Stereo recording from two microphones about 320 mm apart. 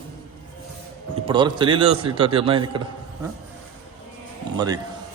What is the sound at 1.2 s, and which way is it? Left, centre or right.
A man's voice, centre.